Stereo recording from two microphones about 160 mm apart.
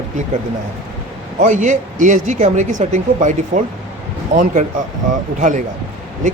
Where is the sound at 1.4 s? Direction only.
50° right (ahead or behind).